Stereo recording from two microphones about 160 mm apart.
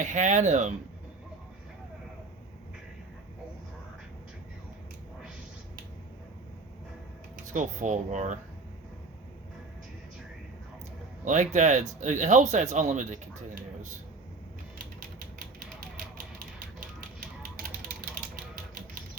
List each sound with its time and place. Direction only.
0.0 s speech: 50° right (ahead or behind)
7.4 s speech: 50° right (ahead or behind)
11.3 s speech: 50° right (ahead or behind)